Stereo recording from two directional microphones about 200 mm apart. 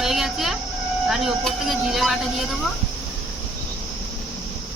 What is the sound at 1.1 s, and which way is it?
Speech, centre (ahead or behind).